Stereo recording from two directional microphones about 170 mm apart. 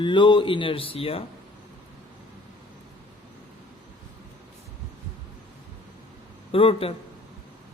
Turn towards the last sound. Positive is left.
turn(degrees=35)  # may be behind; listen again after turning